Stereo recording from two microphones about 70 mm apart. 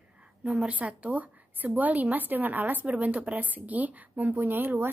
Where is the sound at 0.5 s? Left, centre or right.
Centre.